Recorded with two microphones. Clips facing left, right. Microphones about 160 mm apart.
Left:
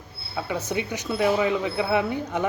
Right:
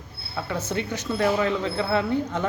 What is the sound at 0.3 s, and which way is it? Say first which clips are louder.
Speech: left 1 dB; 15° left (ahead or behind).